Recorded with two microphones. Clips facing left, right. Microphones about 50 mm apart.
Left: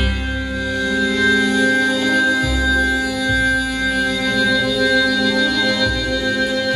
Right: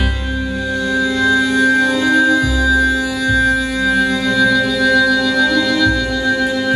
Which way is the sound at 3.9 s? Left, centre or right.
Centre.